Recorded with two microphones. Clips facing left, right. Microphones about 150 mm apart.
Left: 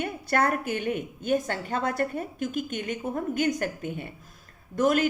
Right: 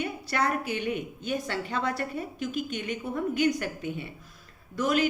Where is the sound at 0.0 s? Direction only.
50° left (ahead or behind).